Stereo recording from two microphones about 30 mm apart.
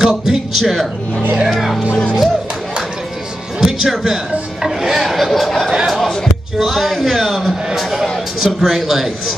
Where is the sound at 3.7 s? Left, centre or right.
Centre.